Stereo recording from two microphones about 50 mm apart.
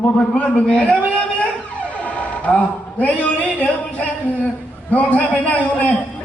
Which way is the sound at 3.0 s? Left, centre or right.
Left.